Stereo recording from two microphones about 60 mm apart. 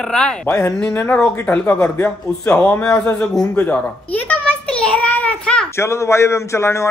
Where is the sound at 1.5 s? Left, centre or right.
Left.